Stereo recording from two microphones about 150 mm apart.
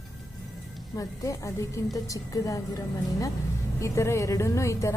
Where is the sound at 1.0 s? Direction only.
20° left (ahead or behind).